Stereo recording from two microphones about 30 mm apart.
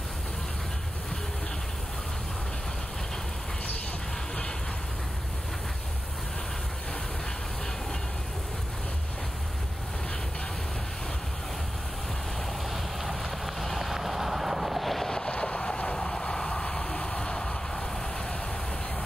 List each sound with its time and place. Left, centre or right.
13.0 s vehicle: centre
15.3 s vehicle: left
17.1 s a sound: left